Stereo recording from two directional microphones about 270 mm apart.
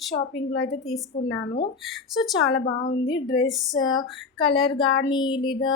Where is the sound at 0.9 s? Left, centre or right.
Left.